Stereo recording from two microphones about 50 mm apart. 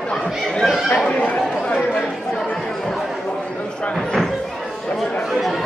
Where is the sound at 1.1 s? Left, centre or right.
Left.